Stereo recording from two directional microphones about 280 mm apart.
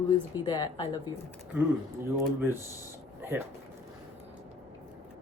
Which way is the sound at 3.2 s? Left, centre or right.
Centre.